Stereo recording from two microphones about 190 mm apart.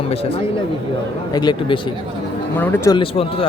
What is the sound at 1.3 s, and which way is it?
Speech, 25° left (ahead or behind).